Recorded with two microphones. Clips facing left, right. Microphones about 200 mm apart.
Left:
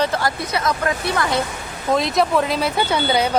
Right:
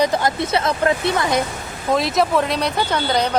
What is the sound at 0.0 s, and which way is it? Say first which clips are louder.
Speech: right 3 dB; 20° right (ahead or behind).